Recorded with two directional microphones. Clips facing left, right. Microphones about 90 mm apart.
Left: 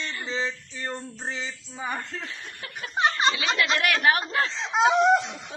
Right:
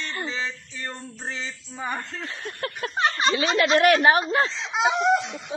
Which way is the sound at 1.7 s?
Centre (ahead or behind).